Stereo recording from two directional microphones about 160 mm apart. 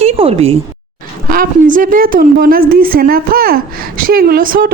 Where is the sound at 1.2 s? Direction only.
60° right (ahead or behind).